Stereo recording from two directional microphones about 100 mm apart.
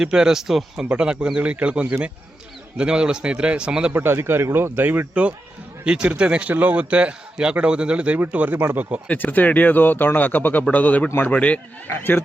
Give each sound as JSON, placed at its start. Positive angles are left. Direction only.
{"t": 0.0, "sound": "a man's voice", "side_deg": -5}
{"t": 3.9, "sound": "a man's voice", "side_deg": -25}
{"t": 9.0, "sound": "speech", "side_deg": 20}